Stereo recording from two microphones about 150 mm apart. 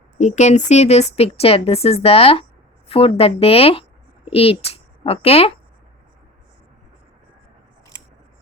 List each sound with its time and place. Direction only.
0.2 s a woman's voice: 50° left (ahead or behind)